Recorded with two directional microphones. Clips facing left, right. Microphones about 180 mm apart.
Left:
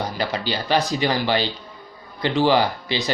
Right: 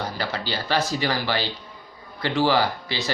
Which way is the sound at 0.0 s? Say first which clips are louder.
Left 3 dB; 15° left (ahead or behind).